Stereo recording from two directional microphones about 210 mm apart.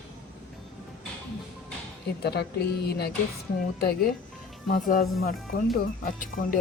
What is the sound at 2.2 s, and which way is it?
Speech, 50° left (ahead or behind).